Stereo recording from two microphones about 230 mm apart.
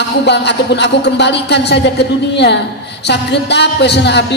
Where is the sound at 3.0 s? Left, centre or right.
Left.